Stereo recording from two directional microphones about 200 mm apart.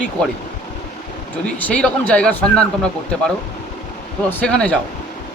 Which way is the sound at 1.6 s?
5° left (ahead or behind).